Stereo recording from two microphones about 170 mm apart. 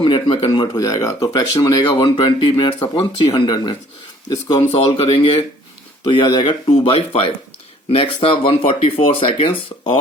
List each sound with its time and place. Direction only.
0.0 s speech: 30° left (ahead or behind)